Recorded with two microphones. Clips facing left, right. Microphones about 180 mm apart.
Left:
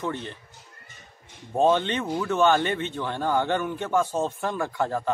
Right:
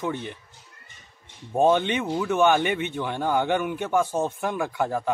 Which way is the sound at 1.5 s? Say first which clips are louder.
Right 1 dB; 15° right (ahead or behind).